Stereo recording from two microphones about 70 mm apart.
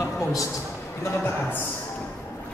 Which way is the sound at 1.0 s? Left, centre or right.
Left.